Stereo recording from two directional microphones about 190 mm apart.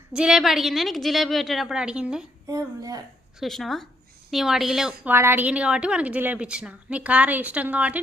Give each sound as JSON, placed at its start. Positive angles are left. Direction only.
{"t": 0.1, "sound": "a woman's voice", "side_deg": -5}
{"t": 2.5, "sound": "a woman's voice", "side_deg": -20}
{"t": 3.4, "sound": "a woman's voice", "side_deg": 0}